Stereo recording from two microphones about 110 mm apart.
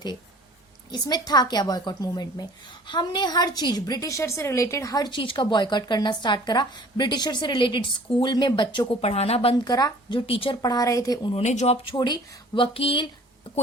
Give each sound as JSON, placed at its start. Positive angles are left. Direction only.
{"t": 0.9, "sound": "a woman's voice", "side_deg": 40}
{"t": 9.0, "sound": "speech", "side_deg": 70}
{"t": 9.6, "sound": "a woman's voice", "side_deg": 40}
{"t": 10.2, "sound": "speech", "side_deg": 55}
{"t": 10.6, "sound": "a woman's voice", "side_deg": 35}
{"t": 11.3, "sound": "speech", "side_deg": 80}
{"t": 11.9, "sound": "a woman's voice", "side_deg": 40}